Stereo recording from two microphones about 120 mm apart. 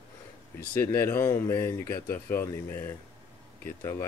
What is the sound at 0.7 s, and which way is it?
Speech, 20° left (ahead or behind).